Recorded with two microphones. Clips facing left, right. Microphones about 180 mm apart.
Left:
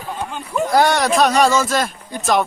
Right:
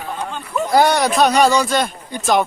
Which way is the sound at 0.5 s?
Centre (ahead or behind).